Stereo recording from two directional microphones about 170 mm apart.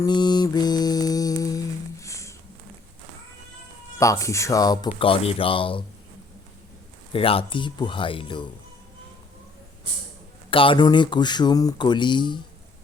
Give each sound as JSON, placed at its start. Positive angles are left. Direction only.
{"t": 0.0, "sound": "mantra", "side_deg": 25}
{"t": 4.0, "sound": "speech", "side_deg": 20}
{"t": 4.9, "sound": "speech", "side_deg": 35}
{"t": 7.1, "sound": "speech", "side_deg": 35}
{"t": 10.5, "sound": "speech", "side_deg": 30}